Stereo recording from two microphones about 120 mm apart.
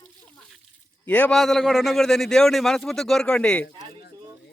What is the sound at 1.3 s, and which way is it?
A man's voice, centre (ahead or behind).